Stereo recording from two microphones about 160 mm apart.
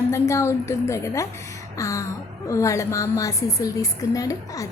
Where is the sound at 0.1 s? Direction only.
15° left (ahead or behind).